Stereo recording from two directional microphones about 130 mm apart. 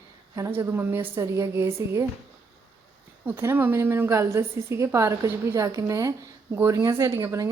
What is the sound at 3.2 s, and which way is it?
A woman's voice, 20° right (ahead or behind).